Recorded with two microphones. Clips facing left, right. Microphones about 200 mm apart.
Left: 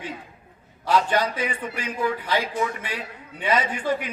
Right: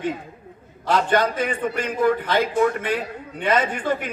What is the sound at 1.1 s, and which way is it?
A man's voice, 50° right (ahead or behind).